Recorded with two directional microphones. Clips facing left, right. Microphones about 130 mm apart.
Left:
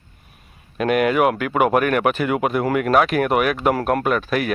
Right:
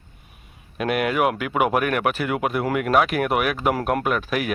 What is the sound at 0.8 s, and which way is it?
Speech, 5° right (ahead or behind).